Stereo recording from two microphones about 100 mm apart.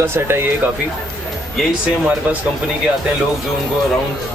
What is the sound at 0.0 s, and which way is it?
Speech, 25° right (ahead or behind).